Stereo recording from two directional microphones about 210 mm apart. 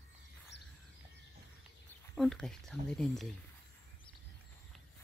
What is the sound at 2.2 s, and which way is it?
Speech, centre (ahead or behind).